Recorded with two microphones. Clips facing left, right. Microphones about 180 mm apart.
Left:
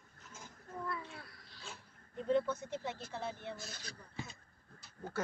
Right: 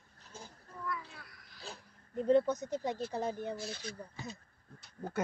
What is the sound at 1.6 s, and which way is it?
Speech, 40° right (ahead or behind).